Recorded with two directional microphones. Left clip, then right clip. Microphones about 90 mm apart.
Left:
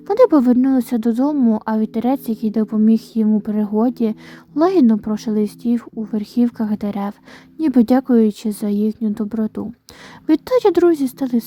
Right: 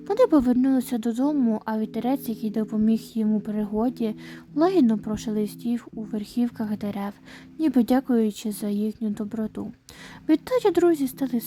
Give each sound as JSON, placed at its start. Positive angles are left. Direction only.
{"t": 0.1, "sound": "a woman's voice", "side_deg": 30}